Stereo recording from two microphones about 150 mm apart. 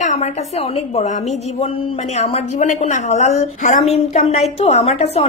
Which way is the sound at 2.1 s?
50° left (ahead or behind).